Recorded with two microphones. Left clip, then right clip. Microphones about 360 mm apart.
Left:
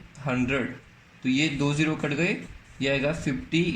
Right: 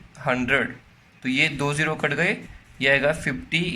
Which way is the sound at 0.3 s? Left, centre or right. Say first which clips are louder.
Right 6 dB; right.